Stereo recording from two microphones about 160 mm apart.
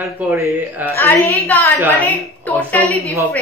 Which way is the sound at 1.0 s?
20° left (ahead or behind).